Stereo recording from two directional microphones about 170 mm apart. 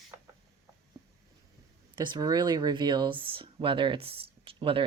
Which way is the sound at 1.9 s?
25° right (ahead or behind).